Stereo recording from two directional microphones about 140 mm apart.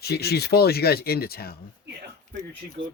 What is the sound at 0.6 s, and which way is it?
Speech, 90° left.